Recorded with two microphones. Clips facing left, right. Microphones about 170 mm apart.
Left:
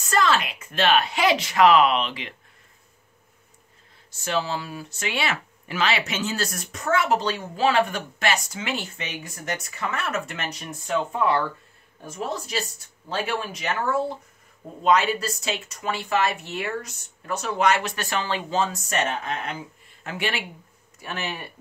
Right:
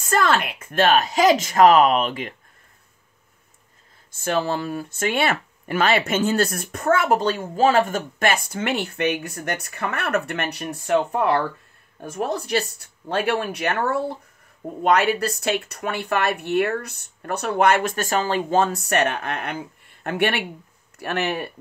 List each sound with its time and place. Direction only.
0.0 s speech: 50° right (ahead or behind)
4.1 s speech: 50° right (ahead or behind)